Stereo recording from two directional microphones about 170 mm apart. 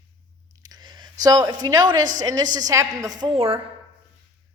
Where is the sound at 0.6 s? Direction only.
25° right (ahead or behind).